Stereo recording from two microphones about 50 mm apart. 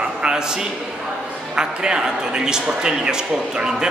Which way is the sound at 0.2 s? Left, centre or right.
Centre.